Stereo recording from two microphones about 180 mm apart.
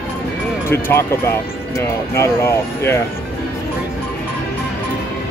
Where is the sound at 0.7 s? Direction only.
15° left (ahead or behind).